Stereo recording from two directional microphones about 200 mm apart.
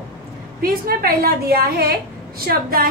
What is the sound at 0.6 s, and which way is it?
A woman's voice, 50° right (ahead or behind).